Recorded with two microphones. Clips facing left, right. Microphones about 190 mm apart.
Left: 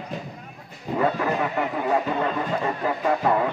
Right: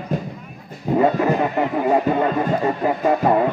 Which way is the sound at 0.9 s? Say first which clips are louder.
Right 7 dB; 50° right (ahead or behind).